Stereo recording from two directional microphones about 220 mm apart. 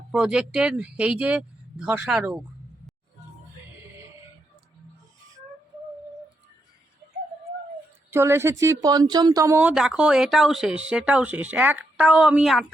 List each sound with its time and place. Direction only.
0.1 s speech: 5° right (ahead or behind)
8.1 s speech: 10° right (ahead or behind)